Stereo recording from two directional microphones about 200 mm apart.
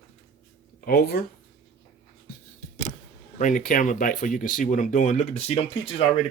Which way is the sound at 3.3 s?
40° left (ahead or behind).